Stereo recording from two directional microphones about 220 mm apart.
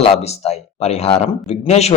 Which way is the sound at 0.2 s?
30° left (ahead or behind).